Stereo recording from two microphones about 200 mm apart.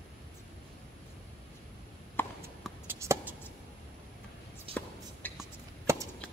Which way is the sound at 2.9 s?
10° right (ahead or behind).